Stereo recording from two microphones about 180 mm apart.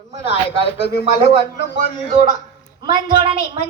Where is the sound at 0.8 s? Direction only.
70° left (ahead or behind).